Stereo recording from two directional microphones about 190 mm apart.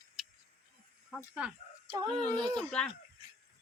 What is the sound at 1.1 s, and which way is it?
Speech, 5° right (ahead or behind).